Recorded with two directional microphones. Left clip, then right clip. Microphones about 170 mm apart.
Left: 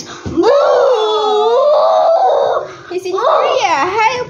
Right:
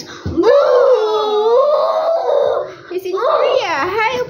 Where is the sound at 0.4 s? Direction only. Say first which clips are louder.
Left 1 dB; 40° left (ahead or behind).